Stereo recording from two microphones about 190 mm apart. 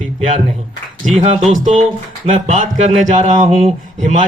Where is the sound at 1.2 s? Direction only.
35° right (ahead or behind).